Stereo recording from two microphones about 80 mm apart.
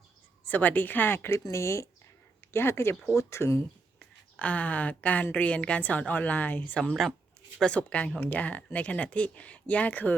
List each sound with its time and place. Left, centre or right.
0.4 s a woman's voice: left
4.4 s a woman's voice: centre